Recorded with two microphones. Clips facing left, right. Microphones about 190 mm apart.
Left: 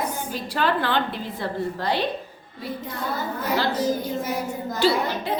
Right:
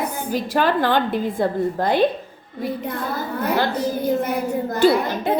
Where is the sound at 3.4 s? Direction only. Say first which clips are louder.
Right 2 dB; 60° right (ahead or behind).